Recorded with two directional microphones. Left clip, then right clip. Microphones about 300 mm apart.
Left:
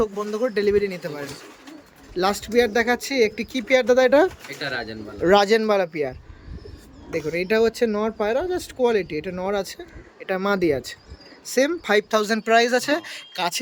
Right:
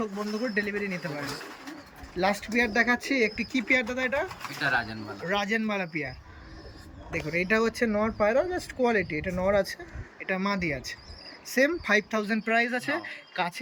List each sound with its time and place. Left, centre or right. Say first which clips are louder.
0.0 s speech: left 8 dB; centre
5.3 s speech: left 11 dB; centre
12.2 s speech: left 8 dB; left